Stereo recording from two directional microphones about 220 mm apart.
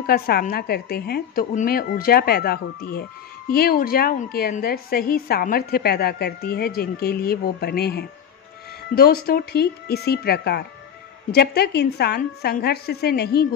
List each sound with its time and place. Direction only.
0.0 s a woman's voice: 45° left (ahead or behind)